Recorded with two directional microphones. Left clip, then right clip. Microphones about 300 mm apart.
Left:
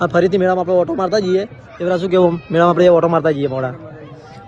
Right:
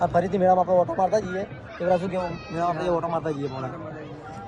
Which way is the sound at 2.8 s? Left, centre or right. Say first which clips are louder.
Left 14 dB; centre.